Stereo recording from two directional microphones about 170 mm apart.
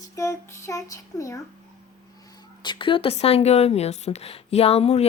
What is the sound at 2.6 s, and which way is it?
Speech, 30° left (ahead or behind).